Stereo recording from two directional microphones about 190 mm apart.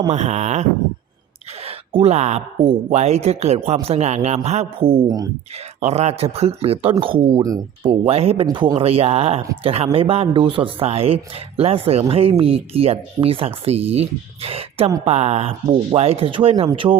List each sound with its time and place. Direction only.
0.1 s speech: 35° right (ahead or behind)
1.6 s speech: 30° right (ahead or behind)
5.8 s speech: 35° right (ahead or behind)